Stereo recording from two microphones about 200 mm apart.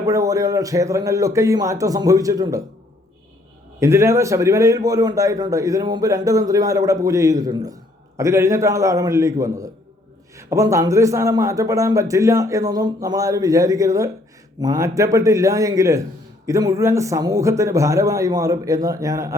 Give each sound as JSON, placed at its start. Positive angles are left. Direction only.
{"t": 0.0, "sound": "a man's voice", "side_deg": -15}
{"t": 3.8, "sound": "a man's voice", "side_deg": -15}